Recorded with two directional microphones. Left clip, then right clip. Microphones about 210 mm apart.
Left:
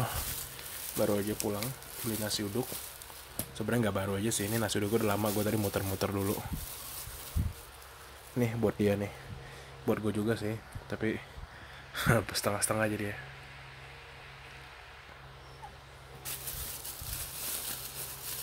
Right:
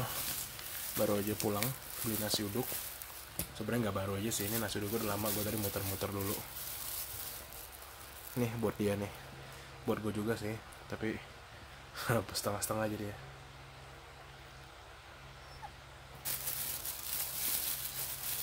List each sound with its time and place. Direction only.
0.9 s speech: 10° left (ahead or behind)
2.2 s speech: 15° left (ahead or behind)
3.5 s speech: 30° left (ahead or behind)
8.4 s speech: 20° left (ahead or behind)